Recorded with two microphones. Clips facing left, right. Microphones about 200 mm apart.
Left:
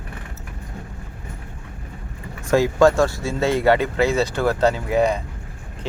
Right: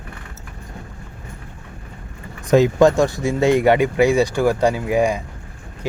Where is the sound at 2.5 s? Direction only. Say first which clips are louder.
Right 2 dB; 20° right (ahead or behind).